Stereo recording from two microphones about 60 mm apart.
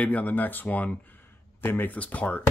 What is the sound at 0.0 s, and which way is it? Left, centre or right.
Speech, left.